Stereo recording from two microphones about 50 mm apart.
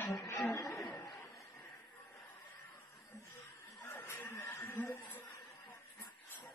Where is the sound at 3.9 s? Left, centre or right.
Left.